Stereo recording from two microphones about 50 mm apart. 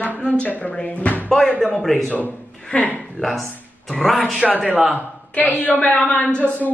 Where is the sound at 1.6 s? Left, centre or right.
Centre.